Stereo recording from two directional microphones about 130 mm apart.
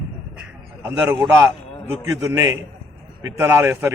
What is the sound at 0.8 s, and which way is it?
A man's voice, 20° right (ahead or behind).